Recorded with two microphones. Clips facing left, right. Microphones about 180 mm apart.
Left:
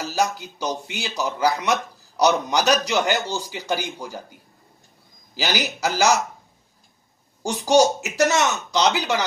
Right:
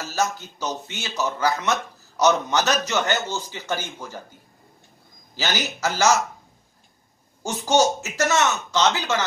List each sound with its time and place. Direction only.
0.0 s speech: 15° left (ahead or behind)
5.3 s speech: 10° left (ahead or behind)
7.4 s speech: 15° left (ahead or behind)